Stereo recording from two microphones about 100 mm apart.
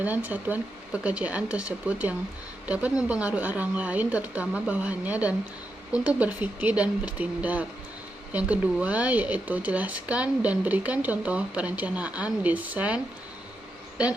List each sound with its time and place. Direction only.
0.0 s speech: 15° right (ahead or behind)